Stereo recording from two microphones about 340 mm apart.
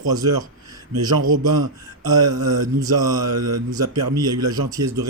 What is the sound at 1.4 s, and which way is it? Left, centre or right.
Speech, right.